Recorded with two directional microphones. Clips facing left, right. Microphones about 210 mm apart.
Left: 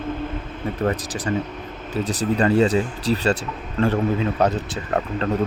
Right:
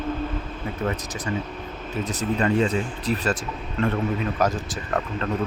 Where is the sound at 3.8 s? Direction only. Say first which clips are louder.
Left 4 dB; 30° left (ahead or behind).